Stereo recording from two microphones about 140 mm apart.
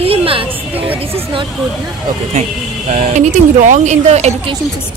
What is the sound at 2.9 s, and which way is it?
Speech, 60° right (ahead or behind).